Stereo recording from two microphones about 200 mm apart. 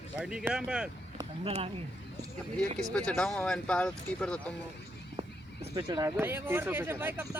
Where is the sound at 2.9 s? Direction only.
5° left (ahead or behind).